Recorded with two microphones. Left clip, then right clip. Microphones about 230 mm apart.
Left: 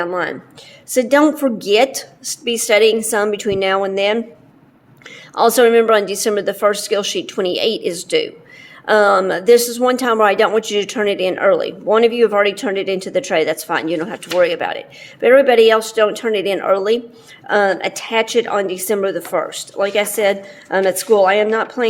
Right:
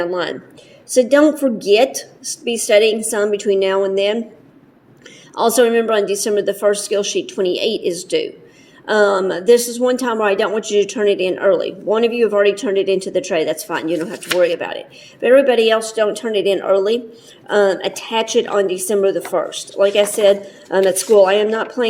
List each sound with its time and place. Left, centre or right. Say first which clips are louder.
0.9 s speech: right 1 dB; centre
5.3 s a woman's voice: left 2 dB; centre